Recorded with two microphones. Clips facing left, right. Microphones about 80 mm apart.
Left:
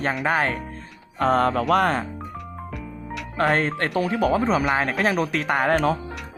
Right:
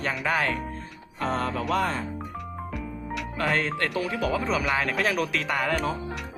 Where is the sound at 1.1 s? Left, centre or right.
Left.